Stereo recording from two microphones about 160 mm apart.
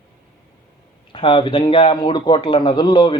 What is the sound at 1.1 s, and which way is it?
Speech, 30° left (ahead or behind).